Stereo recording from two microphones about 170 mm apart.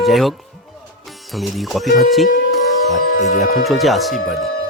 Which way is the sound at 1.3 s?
Centre (ahead or behind).